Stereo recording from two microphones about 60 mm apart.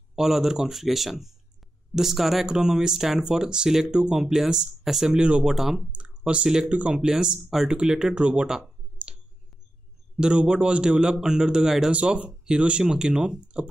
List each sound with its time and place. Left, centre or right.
0.1 s speech: centre
5.9 s speech: centre
10.2 s speech: centre
11.9 s speech: right